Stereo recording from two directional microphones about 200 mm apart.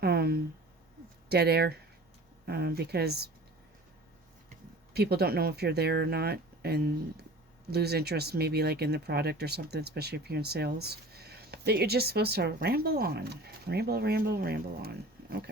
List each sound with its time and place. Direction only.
0.0 s a sound: 50° right (ahead or behind)
1.3 s speech: 50° right (ahead or behind)
4.9 s speech: 50° right (ahead or behind)